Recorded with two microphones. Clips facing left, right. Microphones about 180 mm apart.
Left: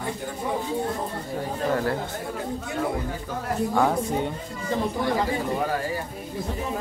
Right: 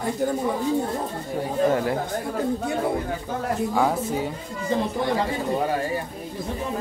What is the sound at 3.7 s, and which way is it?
Speech, 5° right (ahead or behind).